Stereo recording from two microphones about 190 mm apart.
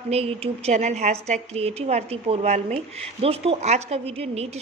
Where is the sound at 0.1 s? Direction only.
35° right (ahead or behind).